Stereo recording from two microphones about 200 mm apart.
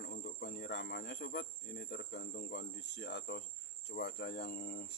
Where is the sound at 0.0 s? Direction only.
55° left (ahead or behind).